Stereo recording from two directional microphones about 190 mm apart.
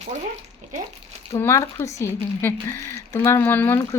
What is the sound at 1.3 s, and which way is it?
Speech, 15° left (ahead or behind).